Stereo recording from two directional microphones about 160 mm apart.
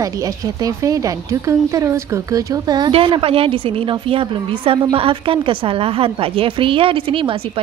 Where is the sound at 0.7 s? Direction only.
20° right (ahead or behind).